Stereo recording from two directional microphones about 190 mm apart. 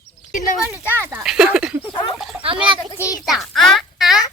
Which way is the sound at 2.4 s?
25° right (ahead or behind).